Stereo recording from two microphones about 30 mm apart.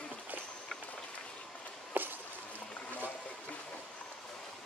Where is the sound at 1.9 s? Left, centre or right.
Right.